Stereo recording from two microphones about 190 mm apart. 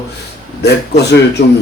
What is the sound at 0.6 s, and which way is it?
Speech, 60° left (ahead or behind).